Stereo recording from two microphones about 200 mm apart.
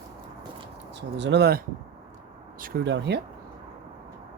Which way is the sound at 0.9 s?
60° right (ahead or behind).